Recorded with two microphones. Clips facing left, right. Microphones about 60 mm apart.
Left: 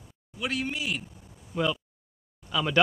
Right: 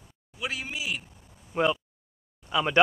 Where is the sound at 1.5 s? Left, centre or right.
Right.